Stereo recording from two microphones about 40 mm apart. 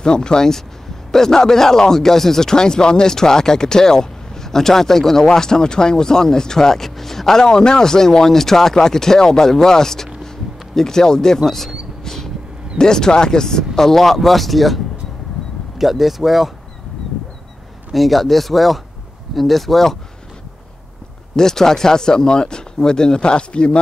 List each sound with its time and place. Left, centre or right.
0.0 s speech: centre
12.0 s vehicle: centre
12.7 s speech: centre
15.8 s speech: centre
17.9 s speech: centre
21.4 s speech: centre